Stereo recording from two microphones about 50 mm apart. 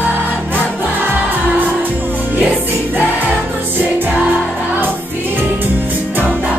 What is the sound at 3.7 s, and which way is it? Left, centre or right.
Music, right.